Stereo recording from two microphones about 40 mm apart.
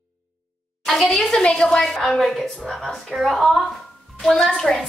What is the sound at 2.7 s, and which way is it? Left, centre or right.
A woman's voice, centre.